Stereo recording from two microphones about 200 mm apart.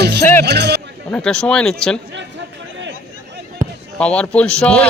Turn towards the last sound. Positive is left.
turn(degrees=5)  # may be behind; listen again after turning